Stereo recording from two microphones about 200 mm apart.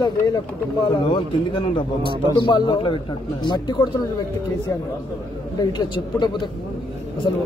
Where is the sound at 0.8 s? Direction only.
25° left (ahead or behind).